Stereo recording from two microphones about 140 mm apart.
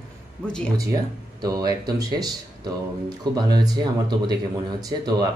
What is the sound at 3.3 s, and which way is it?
Speech, 30° right (ahead or behind).